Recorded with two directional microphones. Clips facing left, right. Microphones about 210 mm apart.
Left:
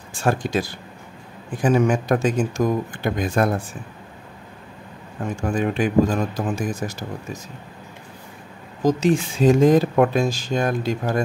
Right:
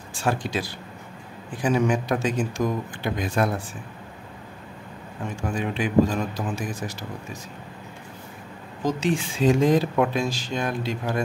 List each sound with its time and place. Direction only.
0.2 s speech: 45° left (ahead or behind)
5.3 s speech: 45° left (ahead or behind)
8.8 s speech: 40° left (ahead or behind)